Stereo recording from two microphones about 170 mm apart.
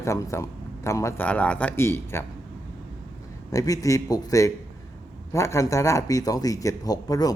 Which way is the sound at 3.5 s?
20° left (ahead or behind).